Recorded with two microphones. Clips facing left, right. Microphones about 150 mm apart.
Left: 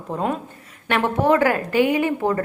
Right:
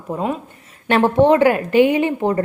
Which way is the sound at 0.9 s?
25° right (ahead or behind).